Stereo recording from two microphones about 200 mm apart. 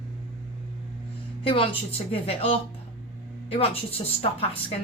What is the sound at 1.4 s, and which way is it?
A woman's voice, 25° left (ahead or behind).